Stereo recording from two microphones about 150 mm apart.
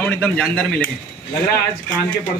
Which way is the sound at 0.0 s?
5° left (ahead or behind).